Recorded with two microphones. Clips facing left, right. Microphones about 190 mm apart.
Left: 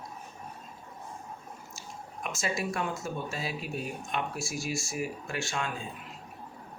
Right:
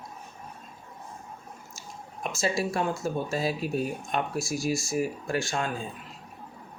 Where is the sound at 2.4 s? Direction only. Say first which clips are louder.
Right 5 dB; 30° right (ahead or behind).